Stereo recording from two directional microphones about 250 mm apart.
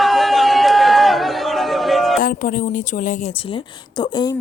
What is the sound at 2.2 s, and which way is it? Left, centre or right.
A woman's voice, left.